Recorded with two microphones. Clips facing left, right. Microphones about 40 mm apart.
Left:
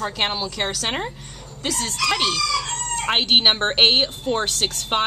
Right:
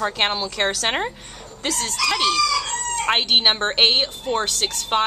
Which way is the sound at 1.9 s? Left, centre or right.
Centre.